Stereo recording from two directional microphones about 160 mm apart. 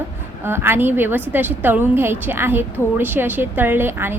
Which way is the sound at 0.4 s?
15° right (ahead or behind).